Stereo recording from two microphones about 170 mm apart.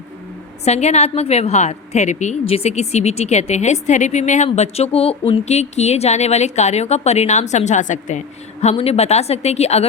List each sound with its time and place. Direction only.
0.6 s a woman's voice: 40° left (ahead or behind)